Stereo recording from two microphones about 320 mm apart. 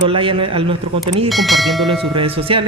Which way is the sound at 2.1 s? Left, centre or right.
Centre.